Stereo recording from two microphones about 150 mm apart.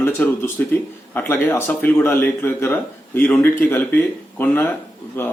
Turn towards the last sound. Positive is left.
turn(degrees=15)  # may be behind; listen again after turning